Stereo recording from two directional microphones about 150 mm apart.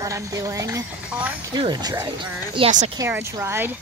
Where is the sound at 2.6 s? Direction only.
35° right (ahead or behind).